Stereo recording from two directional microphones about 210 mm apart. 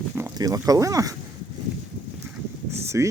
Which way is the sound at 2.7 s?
15° right (ahead or behind).